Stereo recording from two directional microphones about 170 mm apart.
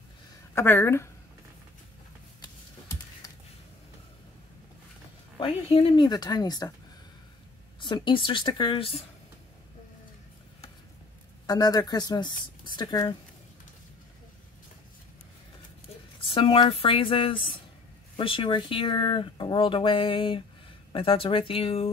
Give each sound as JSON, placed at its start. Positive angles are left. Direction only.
{"t": 0.6, "sound": "a woman's voice", "side_deg": 15}
{"t": 2.4, "sound": "typing", "side_deg": 20}
{"t": 5.4, "sound": "speech", "side_deg": 35}
{"t": 7.8, "sound": "speech", "side_deg": 30}
{"t": 11.4, "sound": "speech", "side_deg": 20}
{"t": 16.2, "sound": "speech", "side_deg": 30}